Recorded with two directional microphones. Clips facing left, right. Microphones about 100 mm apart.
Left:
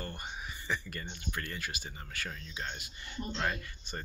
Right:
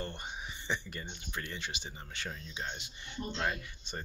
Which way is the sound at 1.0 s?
15° right (ahead or behind).